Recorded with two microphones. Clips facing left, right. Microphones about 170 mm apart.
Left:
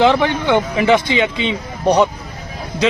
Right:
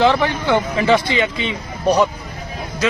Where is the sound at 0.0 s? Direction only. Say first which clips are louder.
Left 2 dB; 15° left (ahead or behind).